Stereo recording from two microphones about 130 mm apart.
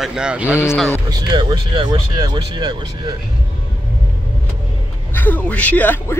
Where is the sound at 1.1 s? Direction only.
35° right (ahead or behind).